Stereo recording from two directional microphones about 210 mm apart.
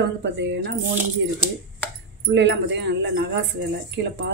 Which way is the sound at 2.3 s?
55° right (ahead or behind).